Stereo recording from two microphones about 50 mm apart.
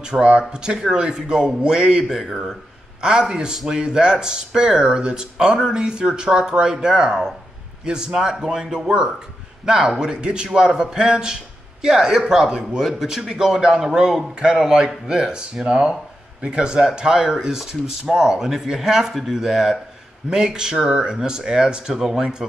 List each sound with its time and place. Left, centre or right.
0.0 s speech: centre
2.1 s speech: centre
3.0 s speech: centre